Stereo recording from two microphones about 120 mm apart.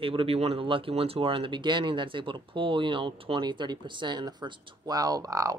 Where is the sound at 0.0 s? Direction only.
50° right (ahead or behind).